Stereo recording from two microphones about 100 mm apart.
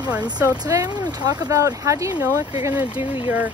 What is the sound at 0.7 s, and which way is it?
Speech, 40° right (ahead or behind).